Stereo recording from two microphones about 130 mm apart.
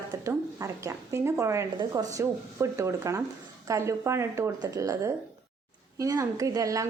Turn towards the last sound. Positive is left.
turn(degrees=-25)  # may be behind; listen again after turning